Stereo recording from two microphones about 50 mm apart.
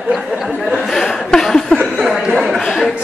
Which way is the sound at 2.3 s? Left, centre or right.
Centre.